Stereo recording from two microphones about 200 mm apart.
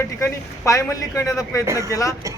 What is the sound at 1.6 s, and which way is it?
Speech, 15° right (ahead or behind).